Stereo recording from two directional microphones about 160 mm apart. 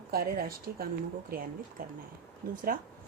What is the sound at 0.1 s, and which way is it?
A woman's voice, 70° right (ahead or behind).